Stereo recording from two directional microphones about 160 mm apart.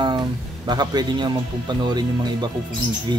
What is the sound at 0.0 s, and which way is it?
Speech, 25° right (ahead or behind).